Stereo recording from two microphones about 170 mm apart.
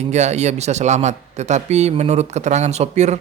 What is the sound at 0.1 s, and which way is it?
Speech, 40° right (ahead or behind).